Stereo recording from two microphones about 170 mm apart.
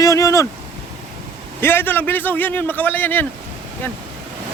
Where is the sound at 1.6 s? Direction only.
10° left (ahead or behind).